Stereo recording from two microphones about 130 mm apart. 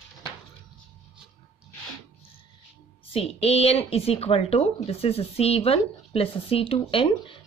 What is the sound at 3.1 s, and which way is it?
Speech, 50° left (ahead or behind).